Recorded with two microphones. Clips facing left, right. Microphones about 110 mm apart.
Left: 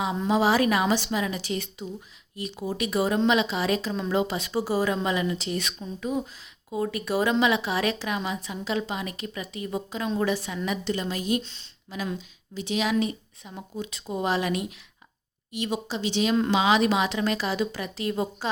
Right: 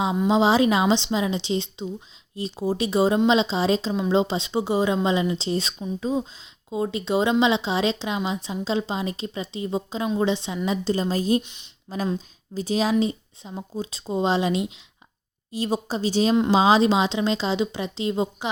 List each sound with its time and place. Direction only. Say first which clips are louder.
0.3 s a woman's voice: right 3 dB; 25° right (ahead or behind)
11.4 s speech: left 1 dB; 15° right (ahead or behind)
11.9 s a woman's voice: right 5 dB; 35° right (ahead or behind)